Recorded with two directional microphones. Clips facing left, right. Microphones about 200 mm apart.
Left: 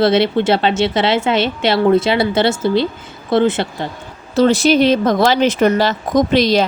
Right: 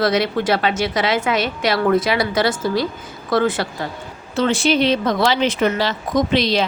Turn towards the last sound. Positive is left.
turn(degrees=45)  # may be behind; listen again after turning